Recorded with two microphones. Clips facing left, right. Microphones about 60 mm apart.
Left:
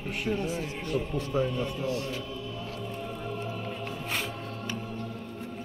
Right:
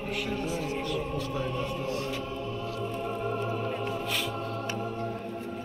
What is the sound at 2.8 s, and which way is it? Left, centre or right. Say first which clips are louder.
Music: right 7 dB; right.